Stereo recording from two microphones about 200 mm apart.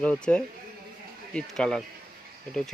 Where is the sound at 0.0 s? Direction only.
5° left (ahead or behind).